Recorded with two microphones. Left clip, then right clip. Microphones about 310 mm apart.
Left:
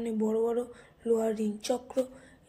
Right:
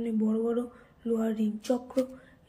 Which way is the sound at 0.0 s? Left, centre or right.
Left.